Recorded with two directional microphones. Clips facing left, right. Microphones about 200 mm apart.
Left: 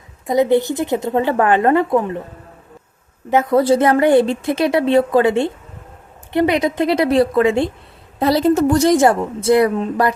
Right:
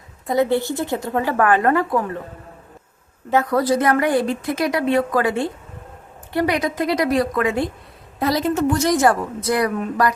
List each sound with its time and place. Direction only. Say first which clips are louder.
0.3 s a woman's voice: left 4 dB; 20° left (ahead or behind)
3.2 s a woman's voice: left 4 dB; 20° left (ahead or behind); by 8.9 s 35° left (ahead or behind)
8.9 s a woman's voice: left 4 dB; 25° left (ahead or behind)